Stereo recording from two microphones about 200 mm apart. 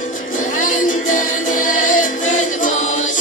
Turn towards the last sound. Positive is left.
turn(degrees=40)  # may be behind; listen again after turning